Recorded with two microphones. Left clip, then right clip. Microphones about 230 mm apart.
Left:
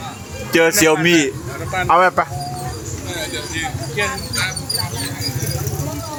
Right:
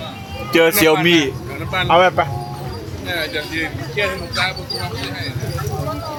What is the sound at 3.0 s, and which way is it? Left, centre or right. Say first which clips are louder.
Speech: right 4 dB; right.